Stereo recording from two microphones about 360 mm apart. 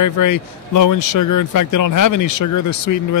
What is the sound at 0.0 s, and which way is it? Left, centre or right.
Speech, left.